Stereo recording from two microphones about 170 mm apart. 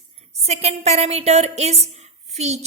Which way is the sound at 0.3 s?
40° right (ahead or behind).